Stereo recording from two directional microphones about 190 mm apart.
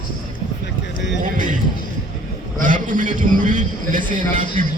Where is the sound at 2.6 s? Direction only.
45° right (ahead or behind).